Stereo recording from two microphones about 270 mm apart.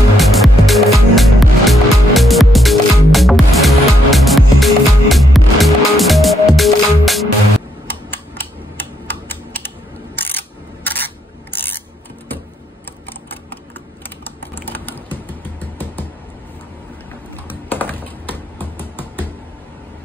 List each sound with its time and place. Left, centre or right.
0.2 s music: centre
7.8 s typing: centre
10.1 s ratchet: centre
14.0 s typing: centre
17.5 s typing: centre